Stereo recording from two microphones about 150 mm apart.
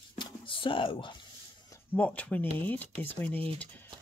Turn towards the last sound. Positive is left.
turn(degrees=10)  # may be behind; listen again after turning